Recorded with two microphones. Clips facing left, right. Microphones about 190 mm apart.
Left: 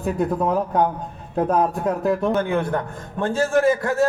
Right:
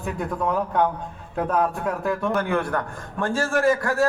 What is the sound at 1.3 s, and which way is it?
A man's voice, 20° left (ahead or behind).